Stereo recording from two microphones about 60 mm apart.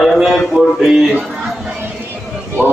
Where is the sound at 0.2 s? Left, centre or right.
Centre.